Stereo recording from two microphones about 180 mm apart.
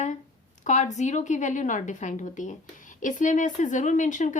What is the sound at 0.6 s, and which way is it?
A woman's voice, 40° left (ahead or behind).